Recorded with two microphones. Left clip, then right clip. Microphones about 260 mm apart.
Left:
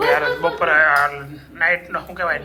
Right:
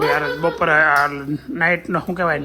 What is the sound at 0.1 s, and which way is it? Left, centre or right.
A man's voice, centre.